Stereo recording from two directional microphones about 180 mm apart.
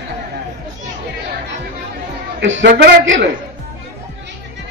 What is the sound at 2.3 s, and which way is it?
Speech, 90° right.